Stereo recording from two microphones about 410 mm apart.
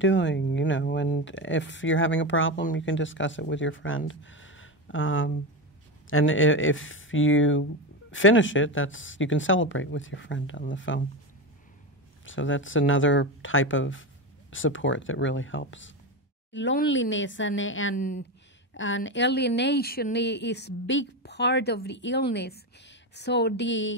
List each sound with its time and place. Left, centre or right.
0.0 s a woman's voice: left
12.3 s a woman's voice: left